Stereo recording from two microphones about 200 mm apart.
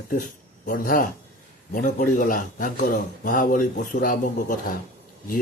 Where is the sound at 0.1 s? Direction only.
40° left (ahead or behind).